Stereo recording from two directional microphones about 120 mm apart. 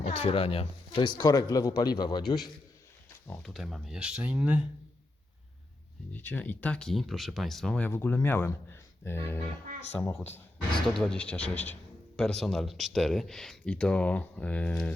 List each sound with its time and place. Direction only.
0.0 s speech: 55° left (ahead or behind)
1.2 s a man's voice: 30° left (ahead or behind)
3.2 s speech: 5° left (ahead or behind); by 4.6 s 10° right (ahead or behind)
6.1 s speech: 15° left (ahead or behind)
7.8 s speech: 15° left (ahead or behind)
10.8 s speech: 5° left (ahead or behind)